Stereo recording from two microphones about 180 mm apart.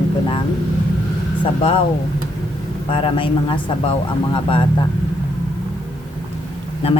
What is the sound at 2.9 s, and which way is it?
A man's voice, 30° left (ahead or behind).